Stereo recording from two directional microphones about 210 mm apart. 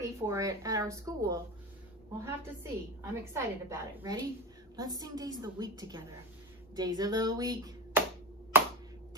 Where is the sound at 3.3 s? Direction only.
10° right (ahead or behind).